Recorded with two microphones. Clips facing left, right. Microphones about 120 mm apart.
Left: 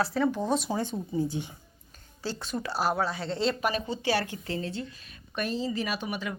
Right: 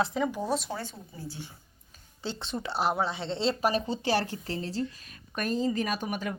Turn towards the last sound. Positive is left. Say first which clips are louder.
# right 1 dB
turn(degrees=-45)  # may be behind; listen again after turning